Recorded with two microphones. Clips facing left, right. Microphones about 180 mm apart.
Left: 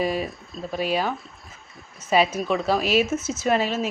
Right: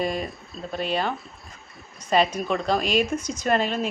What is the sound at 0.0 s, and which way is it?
A woman's voice, 5° left (ahead or behind).